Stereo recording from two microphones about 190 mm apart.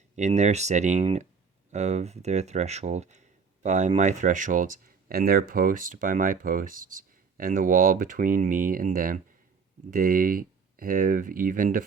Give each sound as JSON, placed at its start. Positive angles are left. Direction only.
{"t": 0.2, "sound": "speech", "side_deg": -40}